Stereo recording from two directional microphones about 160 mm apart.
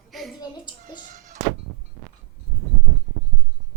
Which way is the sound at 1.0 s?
50° right (ahead or behind).